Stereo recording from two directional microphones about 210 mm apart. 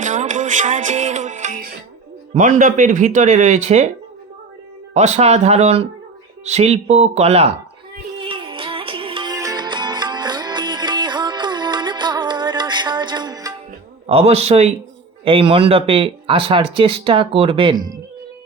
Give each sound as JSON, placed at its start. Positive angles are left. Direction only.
{"t": 0.0, "sound": "music", "side_deg": -35}
{"t": 2.3, "sound": "speech", "side_deg": -35}
{"t": 4.9, "sound": "speech", "side_deg": -30}
{"t": 8.2, "sound": "music", "side_deg": -25}
{"t": 14.1, "sound": "speech", "side_deg": -30}